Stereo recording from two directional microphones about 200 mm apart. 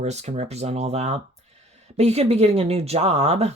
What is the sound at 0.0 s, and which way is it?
Speech, 35° right (ahead or behind).